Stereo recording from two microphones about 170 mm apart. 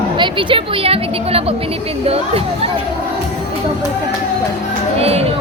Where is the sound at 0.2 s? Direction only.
30° right (ahead or behind).